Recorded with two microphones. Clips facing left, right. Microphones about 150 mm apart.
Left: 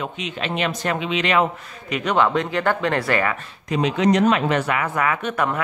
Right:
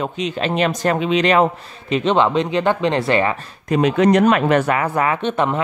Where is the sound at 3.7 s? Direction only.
50° right (ahead or behind); by 5.6 s 25° right (ahead or behind).